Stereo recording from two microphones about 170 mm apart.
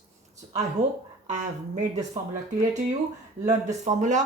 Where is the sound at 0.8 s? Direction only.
40° right (ahead or behind).